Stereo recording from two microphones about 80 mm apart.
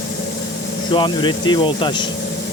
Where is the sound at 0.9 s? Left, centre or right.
Left.